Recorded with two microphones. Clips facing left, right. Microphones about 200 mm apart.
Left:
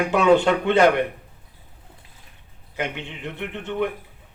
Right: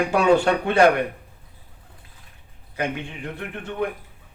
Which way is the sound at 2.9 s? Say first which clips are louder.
Right 1 dB; 25° left (ahead or behind).